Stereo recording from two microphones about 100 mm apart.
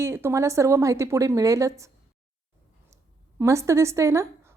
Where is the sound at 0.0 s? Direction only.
25° right (ahead or behind).